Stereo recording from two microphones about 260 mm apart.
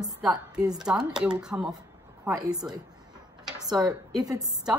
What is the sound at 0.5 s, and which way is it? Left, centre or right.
A woman's voice, centre.